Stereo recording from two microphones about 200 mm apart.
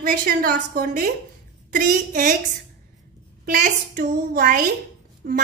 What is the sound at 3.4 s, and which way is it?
A woman's voice, 45° right (ahead or behind).